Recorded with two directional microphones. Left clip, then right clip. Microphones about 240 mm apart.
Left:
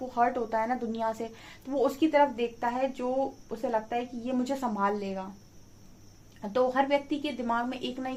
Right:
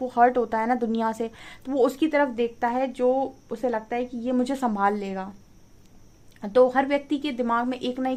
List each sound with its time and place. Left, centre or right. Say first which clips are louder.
0.1 s a woman's voice: right 7 dB; right
6.4 s a woman's voice: right 7 dB; right